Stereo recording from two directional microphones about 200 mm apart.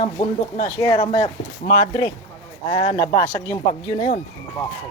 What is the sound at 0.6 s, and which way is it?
Speech, 20° left (ahead or behind).